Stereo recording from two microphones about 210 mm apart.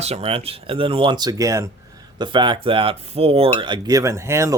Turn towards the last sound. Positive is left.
turn(degrees=-15)  # may be behind; listen again after turning